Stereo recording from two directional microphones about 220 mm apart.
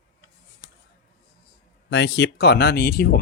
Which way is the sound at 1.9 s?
50° left (ahead or behind).